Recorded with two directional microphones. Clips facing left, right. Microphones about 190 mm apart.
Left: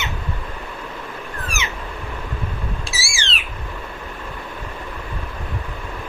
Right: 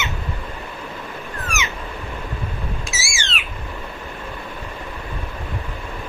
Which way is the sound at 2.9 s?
30° left (ahead or behind).